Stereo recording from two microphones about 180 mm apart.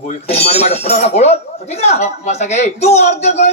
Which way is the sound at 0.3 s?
35° left (ahead or behind).